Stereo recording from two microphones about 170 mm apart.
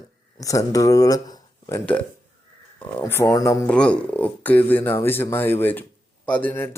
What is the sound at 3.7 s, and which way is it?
Speech, 5° left (ahead or behind).